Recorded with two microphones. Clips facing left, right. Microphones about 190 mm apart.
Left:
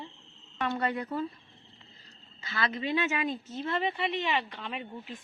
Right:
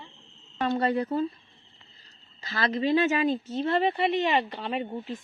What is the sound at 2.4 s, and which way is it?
A woman's voice, 35° right (ahead or behind).